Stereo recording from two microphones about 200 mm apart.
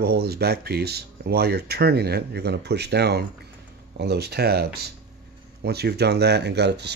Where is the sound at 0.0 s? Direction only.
50° right (ahead or behind).